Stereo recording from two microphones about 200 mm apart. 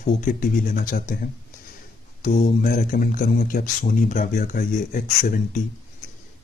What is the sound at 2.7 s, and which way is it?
Speech, 45° left (ahead or behind).